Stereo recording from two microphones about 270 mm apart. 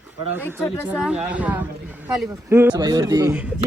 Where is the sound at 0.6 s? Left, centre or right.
Centre.